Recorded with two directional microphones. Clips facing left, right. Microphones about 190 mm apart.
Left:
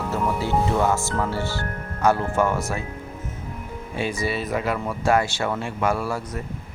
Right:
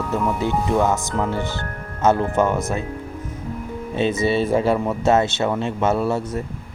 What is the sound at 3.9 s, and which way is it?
Speech, 20° right (ahead or behind).